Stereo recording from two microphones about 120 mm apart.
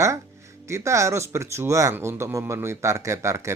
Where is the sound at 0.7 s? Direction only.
25° right (ahead or behind).